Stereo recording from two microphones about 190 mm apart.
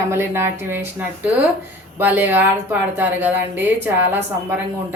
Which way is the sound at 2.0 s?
10° right (ahead or behind).